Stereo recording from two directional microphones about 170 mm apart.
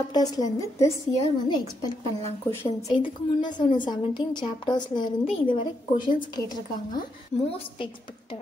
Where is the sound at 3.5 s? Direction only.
25° left (ahead or behind).